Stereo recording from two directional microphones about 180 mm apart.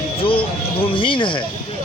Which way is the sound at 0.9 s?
30° left (ahead or behind).